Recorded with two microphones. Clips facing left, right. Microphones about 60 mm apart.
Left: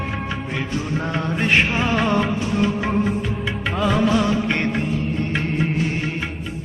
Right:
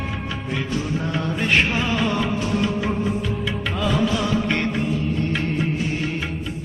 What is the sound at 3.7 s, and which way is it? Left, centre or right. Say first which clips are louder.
Music: left 4 dB; left.